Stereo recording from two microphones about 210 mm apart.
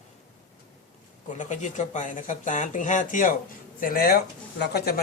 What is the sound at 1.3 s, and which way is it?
Speech, 35° left (ahead or behind).